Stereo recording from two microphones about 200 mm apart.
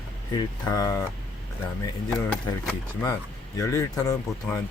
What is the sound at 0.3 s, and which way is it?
Speech, 15° left (ahead or behind).